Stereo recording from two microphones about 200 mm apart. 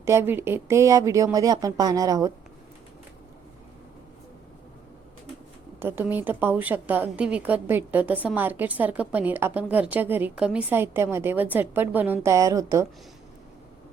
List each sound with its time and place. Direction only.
0.0 s a woman's voice: 10° right (ahead or behind)
5.8 s a woman's voice: 10° right (ahead or behind)